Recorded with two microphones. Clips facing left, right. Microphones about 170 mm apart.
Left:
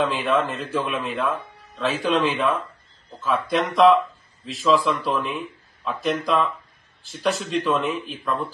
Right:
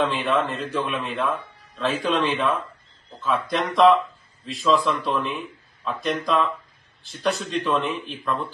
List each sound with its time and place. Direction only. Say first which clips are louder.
0.0 s a man's voice: left 1 dB; centre (ahead or behind)